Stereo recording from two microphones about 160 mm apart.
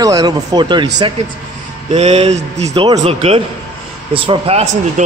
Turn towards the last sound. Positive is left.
turn(degrees=-40)  # may be behind; listen again after turning